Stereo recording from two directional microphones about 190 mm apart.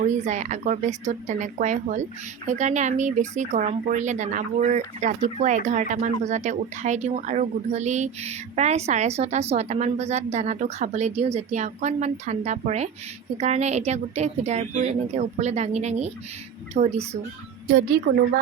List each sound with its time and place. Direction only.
0.0 s speech: 40° right (ahead or behind)